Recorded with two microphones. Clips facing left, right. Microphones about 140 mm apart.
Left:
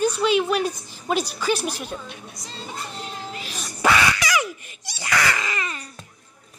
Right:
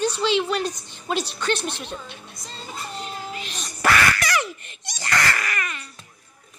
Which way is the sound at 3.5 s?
10° left (ahead or behind).